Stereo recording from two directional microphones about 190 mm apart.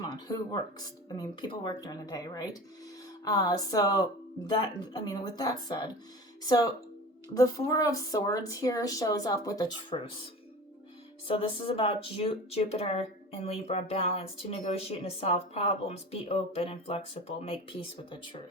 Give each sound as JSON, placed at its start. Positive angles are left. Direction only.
{"t": 0.0, "sound": "speech", "side_deg": 20}
{"t": 7.3, "sound": "speech", "side_deg": 15}
{"t": 11.3, "sound": "speech", "side_deg": 30}